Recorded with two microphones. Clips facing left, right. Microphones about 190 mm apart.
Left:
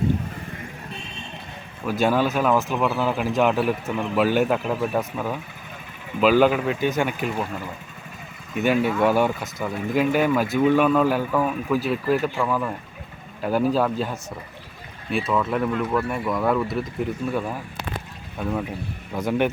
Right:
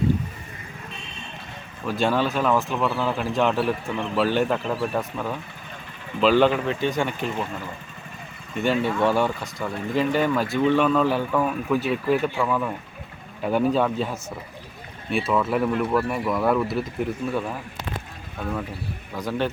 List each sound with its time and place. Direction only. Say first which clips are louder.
1.8 s speech: left 2 dB; 5° left (ahead or behind)
19.1 s a man's voice: left 4 dB; 20° left (ahead or behind)